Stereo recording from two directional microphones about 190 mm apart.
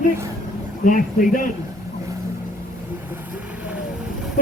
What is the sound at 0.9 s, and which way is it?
Speech, 45° left (ahead or behind).